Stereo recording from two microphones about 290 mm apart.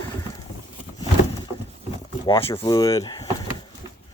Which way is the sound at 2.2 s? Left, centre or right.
Centre.